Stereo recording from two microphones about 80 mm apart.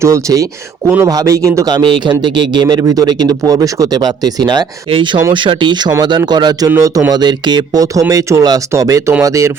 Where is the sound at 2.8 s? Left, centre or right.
Right.